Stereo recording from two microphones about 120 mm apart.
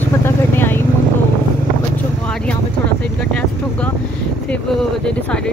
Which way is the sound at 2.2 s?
10° left (ahead or behind).